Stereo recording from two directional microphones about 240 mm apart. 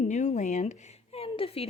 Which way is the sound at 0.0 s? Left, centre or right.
Left.